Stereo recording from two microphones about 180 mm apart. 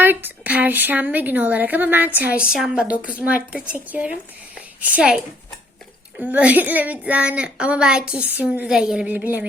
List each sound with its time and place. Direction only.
0.0 s a woman's voice: 10° right (ahead or behind)